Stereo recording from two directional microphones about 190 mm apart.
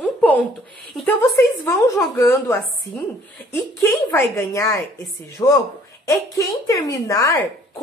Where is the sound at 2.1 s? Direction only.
15° left (ahead or behind).